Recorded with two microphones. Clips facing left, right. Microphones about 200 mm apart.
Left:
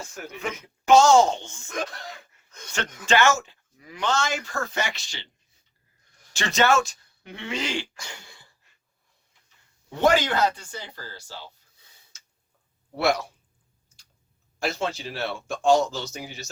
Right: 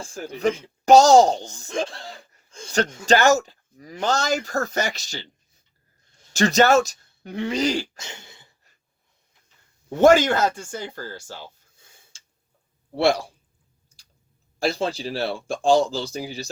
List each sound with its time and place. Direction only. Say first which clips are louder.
0.0 s speech: right 9 dB; 30° right (ahead or behind)
6.1 s a sound: right 1 dB; 25° right (ahead or behind)
6.3 s speech: right 5 dB; 40° right (ahead or behind)
7.9 s throat clearing: right 2 dB; 25° right (ahead or behind)
10.0 s speech: right 5 dB; 45° right (ahead or behind)
12.1 s tick-tock: even; 30° right (ahead or behind)
13.0 s speech: right 4 dB; 30° right (ahead or behind)
14.6 s speech: right 4 dB; 35° right (ahead or behind)